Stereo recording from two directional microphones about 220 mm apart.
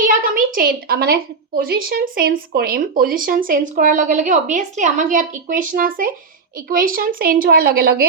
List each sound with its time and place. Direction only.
0.1 s a woman's voice: 40° right (ahead or behind)